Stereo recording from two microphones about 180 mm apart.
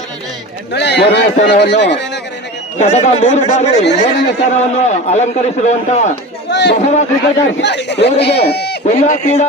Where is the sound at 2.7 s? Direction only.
35° left (ahead or behind).